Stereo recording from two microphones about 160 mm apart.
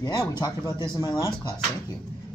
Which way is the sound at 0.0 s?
25° left (ahead or behind).